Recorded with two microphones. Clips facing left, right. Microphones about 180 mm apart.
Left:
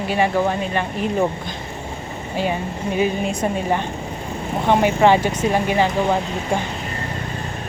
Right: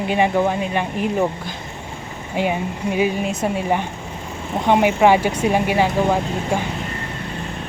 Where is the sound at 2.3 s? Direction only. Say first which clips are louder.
Right 2 dB; 15° right (ahead or behind).